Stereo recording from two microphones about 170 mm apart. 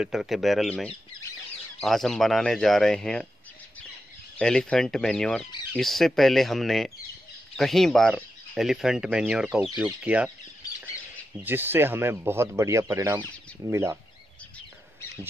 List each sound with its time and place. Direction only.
0.0 s speech: centre (ahead or behind)
4.4 s speech: 5° left (ahead or behind)
11.4 s speech: 10° right (ahead or behind)